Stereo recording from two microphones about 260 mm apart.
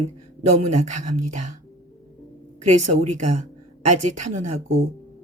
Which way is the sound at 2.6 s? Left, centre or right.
Right.